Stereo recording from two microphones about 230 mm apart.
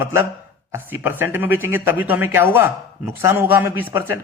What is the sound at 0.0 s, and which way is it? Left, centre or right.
A man's voice, centre.